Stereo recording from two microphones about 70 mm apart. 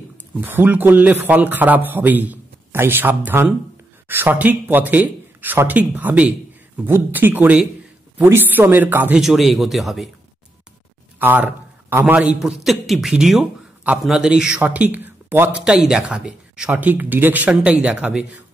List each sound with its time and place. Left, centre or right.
0.3 s a man's voice: right
9.1 s speech: centre
11.1 s a man's voice: right
12.4 s speech: centre
14.6 s speech: right
15.5 s speech: centre
16.7 s speech: right